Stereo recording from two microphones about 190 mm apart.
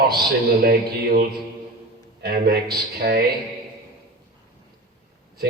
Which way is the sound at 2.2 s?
55° right (ahead or behind).